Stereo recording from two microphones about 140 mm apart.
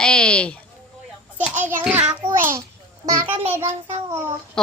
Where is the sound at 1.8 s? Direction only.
5° right (ahead or behind).